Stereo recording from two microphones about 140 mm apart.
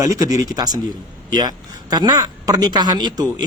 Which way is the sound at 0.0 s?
25° right (ahead or behind).